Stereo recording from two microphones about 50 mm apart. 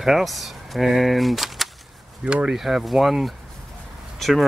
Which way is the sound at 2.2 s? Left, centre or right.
Right.